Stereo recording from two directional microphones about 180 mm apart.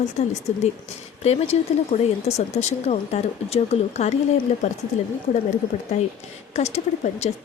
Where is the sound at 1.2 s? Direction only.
35° left (ahead or behind).